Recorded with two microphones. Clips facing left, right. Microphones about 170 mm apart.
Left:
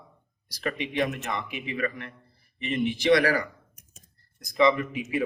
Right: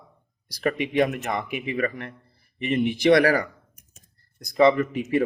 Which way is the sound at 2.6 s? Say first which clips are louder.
Right 5 dB; 55° right (ahead or behind).